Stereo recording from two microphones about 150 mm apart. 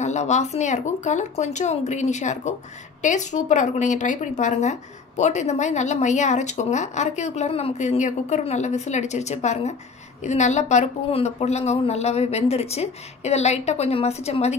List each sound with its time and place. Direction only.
0.0 s speech: 50° left (ahead or behind)